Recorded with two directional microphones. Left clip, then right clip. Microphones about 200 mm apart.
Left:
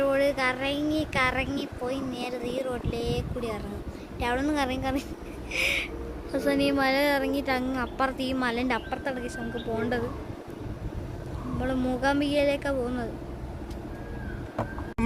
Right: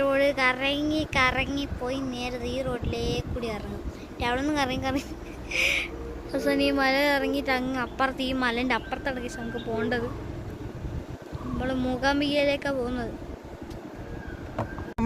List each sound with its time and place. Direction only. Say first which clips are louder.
0.0 s speech: right 2 dB; 10° right (ahead or behind)
4.2 s speech: right 1 dB; 5° left (ahead or behind)
11.6 s speech: even; 5° left (ahead or behind)